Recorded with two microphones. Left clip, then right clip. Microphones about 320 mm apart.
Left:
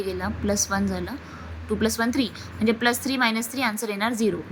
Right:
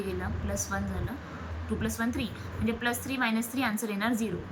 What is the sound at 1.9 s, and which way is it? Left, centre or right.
A woman's voice, centre.